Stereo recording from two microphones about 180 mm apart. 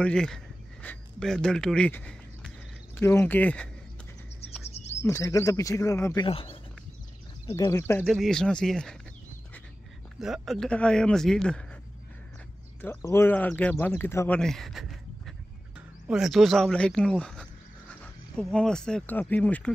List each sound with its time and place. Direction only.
0.0 s speech: 5° left (ahead or behind)
4.6 s chirp: 35° left (ahead or behind)
5.0 s speech: 20° left (ahead or behind)
6.2 s speech: 30° left (ahead or behind)
7.4 s speech: 15° left (ahead or behind)
8.1 s speech: centre (ahead or behind)
10.2 s speech: centre (ahead or behind)
12.8 s speech: 15° left (ahead or behind)